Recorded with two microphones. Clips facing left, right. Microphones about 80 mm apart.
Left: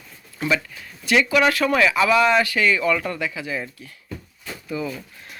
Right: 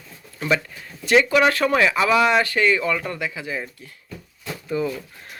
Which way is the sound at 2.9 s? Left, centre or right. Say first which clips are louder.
Left 2 dB; centre.